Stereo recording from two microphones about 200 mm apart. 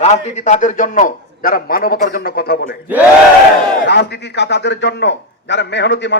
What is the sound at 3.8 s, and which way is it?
A man's voice, 60° left (ahead or behind).